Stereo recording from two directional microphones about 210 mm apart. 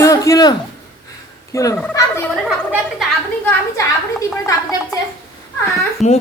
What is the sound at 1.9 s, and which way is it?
Gobble, 10° left (ahead or behind).